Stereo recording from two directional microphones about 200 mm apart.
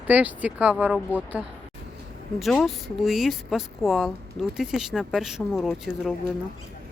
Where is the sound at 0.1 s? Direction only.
5° right (ahead or behind).